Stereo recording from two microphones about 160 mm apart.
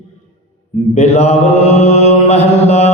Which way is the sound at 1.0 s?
40° left (ahead or behind).